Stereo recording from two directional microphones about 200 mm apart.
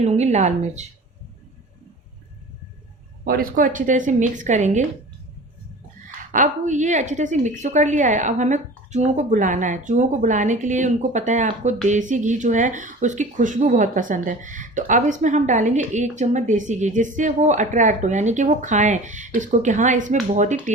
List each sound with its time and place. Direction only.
0.0 s speech: 35° right (ahead or behind)
3.2 s speech: 45° right (ahead or behind)
6.3 s speech: 40° right (ahead or behind)